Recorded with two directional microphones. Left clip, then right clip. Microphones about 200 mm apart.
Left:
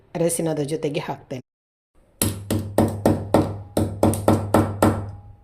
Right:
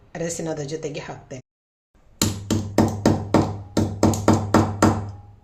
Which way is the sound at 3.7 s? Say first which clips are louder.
Left 1 dB; 5° left (ahead or behind).